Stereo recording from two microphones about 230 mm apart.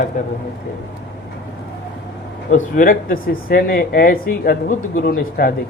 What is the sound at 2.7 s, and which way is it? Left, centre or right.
Speech, left.